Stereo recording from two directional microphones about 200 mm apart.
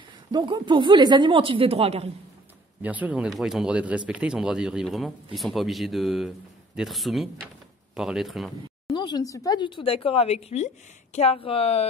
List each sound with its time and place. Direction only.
0.3 s speech: 20° right (ahead or behind)
2.8 s speech: 10° right (ahead or behind)
8.8 s speech: 20° left (ahead or behind)